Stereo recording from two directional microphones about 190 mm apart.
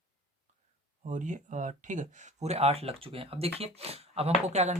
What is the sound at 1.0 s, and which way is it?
Speech, 40° right (ahead or behind).